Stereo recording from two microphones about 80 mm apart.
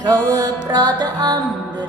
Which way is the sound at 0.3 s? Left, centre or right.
Right.